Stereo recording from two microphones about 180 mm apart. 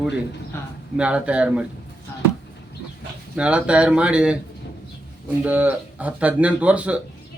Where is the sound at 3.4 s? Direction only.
5° right (ahead or behind).